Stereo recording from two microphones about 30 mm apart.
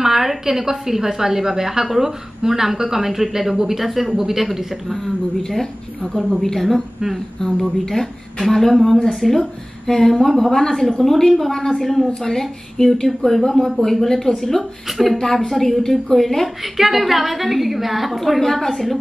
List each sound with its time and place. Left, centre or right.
0.0 s a woman's voice: centre
5.0 s a woman's voice: centre
7.8 s a woman's voice: centre
9.8 s a woman's voice: centre
12.2 s a woman's voice: centre
14.9 s a woman's voice: centre
15.1 s a woman's voice: centre
16.7 s a woman's voice: centre
18.2 s a woman's voice: centre